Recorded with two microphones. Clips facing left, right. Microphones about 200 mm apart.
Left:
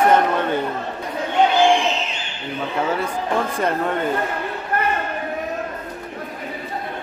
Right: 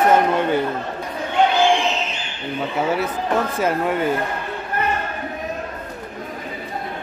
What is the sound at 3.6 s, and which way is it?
Speech, 5° right (ahead or behind).